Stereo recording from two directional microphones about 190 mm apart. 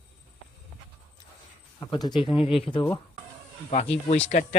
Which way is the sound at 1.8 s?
20° left (ahead or behind).